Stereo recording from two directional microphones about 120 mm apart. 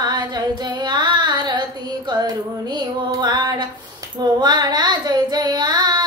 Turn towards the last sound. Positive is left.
turn(degrees=-35)  # may be behind; listen again after turning